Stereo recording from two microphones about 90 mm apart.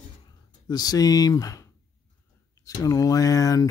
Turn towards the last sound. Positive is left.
turn(degrees=40)  # may be behind; listen again after turning